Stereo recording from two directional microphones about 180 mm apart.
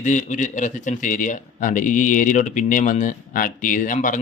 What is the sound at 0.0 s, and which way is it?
Speech, 45° left (ahead or behind).